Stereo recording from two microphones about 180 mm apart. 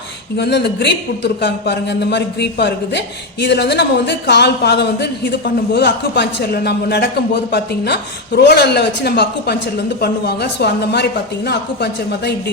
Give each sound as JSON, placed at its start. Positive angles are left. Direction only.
{"t": 0.3, "sound": "speech", "side_deg": 70}